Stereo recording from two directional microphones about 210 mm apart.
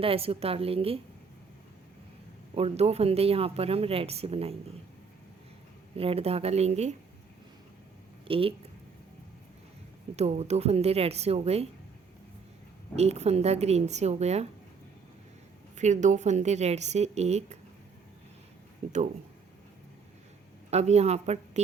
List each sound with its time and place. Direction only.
0.0 s speech: 25° right (ahead or behind)
2.6 s speech: 30° right (ahead or behind)
6.0 s speech: 30° right (ahead or behind)
8.3 s speech: 25° right (ahead or behind)
10.2 s speech: 30° right (ahead or behind)
13.0 s a woman's voice: 30° right (ahead or behind)
15.7 s a woman's voice: 35° right (ahead or behind)
18.8 s a woman's voice: 30° right (ahead or behind)
20.7 s a woman's voice: 30° right (ahead or behind)